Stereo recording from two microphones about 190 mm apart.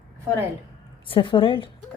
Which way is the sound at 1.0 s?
25° left (ahead or behind).